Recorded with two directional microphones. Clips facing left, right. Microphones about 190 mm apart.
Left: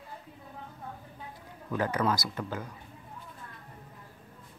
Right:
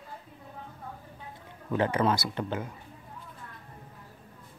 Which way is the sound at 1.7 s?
25° right (ahead or behind).